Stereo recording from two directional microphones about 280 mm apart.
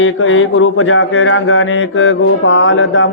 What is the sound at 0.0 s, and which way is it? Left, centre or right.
A man's voice, left.